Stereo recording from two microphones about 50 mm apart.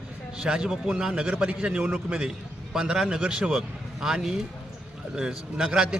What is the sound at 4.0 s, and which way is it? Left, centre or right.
A man's voice, centre.